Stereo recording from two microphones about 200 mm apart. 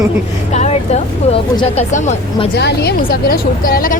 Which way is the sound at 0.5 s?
35° left (ahead or behind).